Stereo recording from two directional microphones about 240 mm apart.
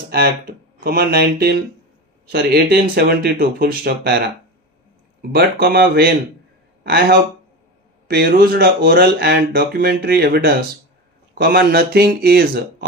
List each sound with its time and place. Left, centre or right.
0.1 s speech: right
5.3 s speech: right